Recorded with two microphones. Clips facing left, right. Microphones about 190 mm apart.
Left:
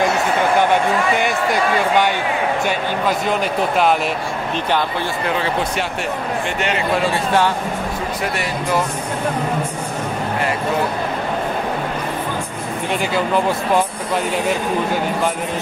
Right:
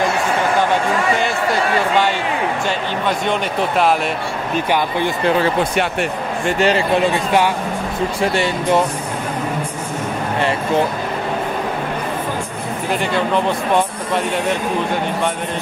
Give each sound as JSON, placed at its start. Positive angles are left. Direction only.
{"t": 3.1, "sound": "speech", "side_deg": 0}
{"t": 4.6, "sound": "speech", "side_deg": -10}
{"t": 6.4, "sound": "a man's voice", "side_deg": -35}
{"t": 7.1, "sound": "speech", "side_deg": -15}
{"t": 8.2, "sound": "speech", "side_deg": -25}
{"t": 12.9, "sound": "speech", "side_deg": 0}